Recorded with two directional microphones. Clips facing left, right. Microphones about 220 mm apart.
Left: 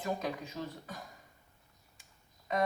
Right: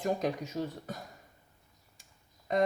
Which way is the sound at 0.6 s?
30° right (ahead or behind).